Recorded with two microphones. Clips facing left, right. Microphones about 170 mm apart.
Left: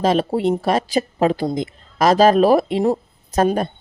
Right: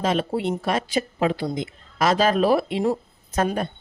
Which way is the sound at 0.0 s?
35° left (ahead or behind).